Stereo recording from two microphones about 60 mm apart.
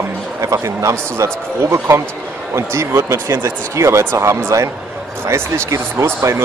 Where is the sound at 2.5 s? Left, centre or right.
Right.